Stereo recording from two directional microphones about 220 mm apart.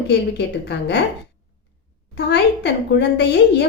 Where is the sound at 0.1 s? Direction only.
50° left (ahead or behind).